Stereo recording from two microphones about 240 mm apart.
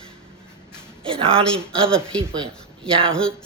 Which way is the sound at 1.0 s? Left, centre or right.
Right.